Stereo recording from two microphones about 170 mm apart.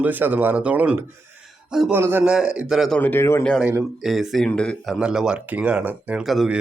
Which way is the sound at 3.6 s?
10° right (ahead or behind).